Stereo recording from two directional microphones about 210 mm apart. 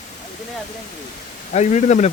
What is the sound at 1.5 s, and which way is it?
Speech, 35° left (ahead or behind).